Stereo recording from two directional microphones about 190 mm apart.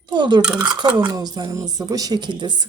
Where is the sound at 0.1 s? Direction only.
25° right (ahead or behind).